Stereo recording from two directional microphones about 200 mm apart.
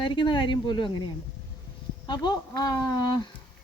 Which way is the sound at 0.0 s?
25° left (ahead or behind).